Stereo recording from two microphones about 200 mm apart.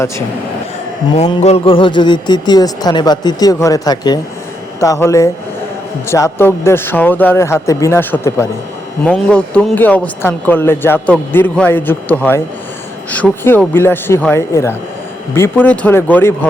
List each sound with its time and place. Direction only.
1.1 s a man's voice: 35° left (ahead or behind); by 16.5 s 10° left (ahead or behind)